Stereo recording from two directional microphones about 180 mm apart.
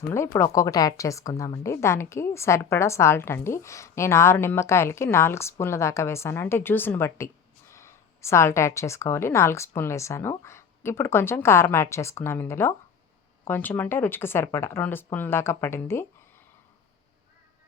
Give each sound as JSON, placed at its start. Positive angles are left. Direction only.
{"t": 0.3, "sound": "a woman's voice", "side_deg": 15}